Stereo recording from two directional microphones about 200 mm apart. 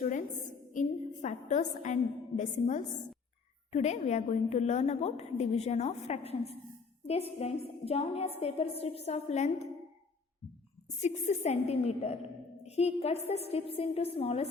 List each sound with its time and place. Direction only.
0.0 s a sound: 40° left (ahead or behind)
0.7 s a woman's voice: 35° left (ahead or behind)
11.0 s a woman's voice: 35° left (ahead or behind)